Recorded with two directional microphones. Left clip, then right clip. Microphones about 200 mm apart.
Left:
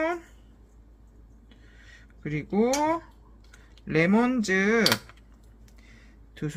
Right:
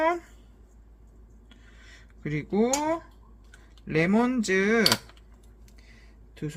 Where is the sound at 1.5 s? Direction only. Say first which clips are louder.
Right 1 dB; 15° right (ahead or behind); by 3.1 s 10° left (ahead or behind).